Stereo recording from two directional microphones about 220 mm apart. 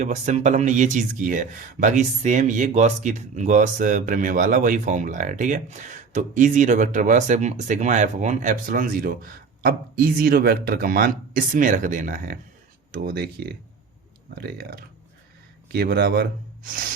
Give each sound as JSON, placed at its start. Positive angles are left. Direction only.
{"t": 0.0, "sound": "speech", "side_deg": -30}